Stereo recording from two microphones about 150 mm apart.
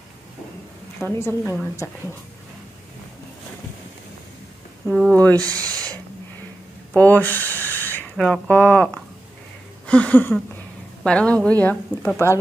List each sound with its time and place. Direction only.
0.9 s a woman's voice: 15° left (ahead or behind)
4.8 s speech: centre (ahead or behind)
5.1 s a woman's voice: 10° left (ahead or behind)
5.5 s speech: 25° right (ahead or behind)
7.0 s a woman's voice: 10° left (ahead or behind)